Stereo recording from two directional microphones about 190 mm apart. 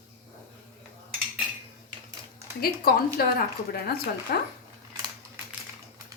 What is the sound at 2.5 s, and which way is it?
A woman's voice, 55° left (ahead or behind).